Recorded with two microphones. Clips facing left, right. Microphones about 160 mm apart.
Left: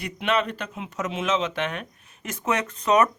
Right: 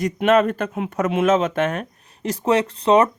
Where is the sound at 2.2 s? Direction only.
30° right (ahead or behind).